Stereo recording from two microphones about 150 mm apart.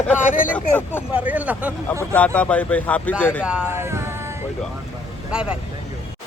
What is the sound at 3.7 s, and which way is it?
Speech, 15° right (ahead or behind).